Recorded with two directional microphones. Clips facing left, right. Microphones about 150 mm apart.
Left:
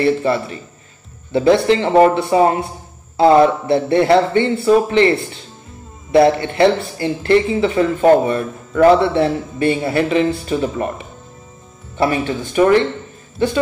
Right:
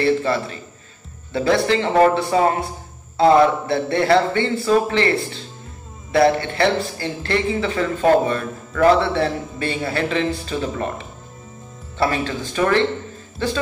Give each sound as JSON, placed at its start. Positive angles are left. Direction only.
{"t": 0.0, "sound": "speech", "side_deg": 20}